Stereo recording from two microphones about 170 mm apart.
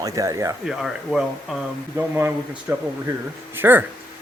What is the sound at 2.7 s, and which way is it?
Speech, 15° right (ahead or behind).